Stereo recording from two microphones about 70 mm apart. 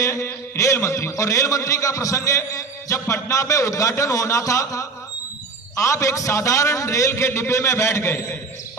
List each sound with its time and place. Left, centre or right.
0.0 s a man's voice: left